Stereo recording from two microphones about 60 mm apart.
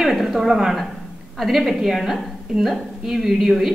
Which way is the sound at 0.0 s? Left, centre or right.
Centre.